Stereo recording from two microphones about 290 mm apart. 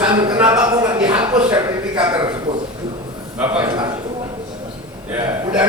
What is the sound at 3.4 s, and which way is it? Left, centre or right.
Speech, centre.